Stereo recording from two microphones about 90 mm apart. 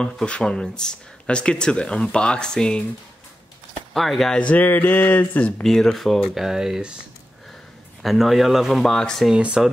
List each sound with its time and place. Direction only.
0.0 s speech: 10° left (ahead or behind)
3.9 s speech: centre (ahead or behind); by 5.5 s 20° left (ahead or behind)
5.6 s speech: 5° left (ahead or behind)
8.0 s speech: centre (ahead or behind)
9.3 s speech: 10° right (ahead or behind)